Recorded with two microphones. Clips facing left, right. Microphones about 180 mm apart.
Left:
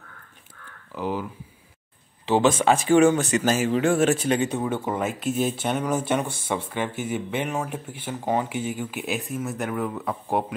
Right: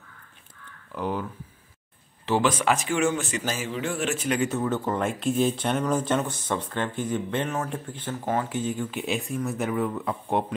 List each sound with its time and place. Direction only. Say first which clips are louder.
0.9 s speech: left 1 dB; 5° left (ahead or behind)
2.2 s speech: left 4 dB; 25° left (ahead or behind)
3.1 s speech: left 6 dB; 70° left (ahead or behind)
3.8 s speech: left 8 dB; 45° left (ahead or behind)
4.1 s speech: left 3 dB; 30° left (ahead or behind); by 10.4 s centre (ahead or behind)